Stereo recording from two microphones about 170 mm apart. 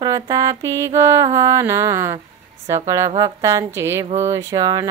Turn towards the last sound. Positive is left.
turn(degrees=-20)  # may be behind; listen again after turning